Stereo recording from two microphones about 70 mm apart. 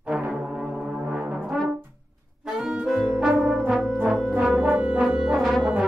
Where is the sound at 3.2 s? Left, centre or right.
Centre.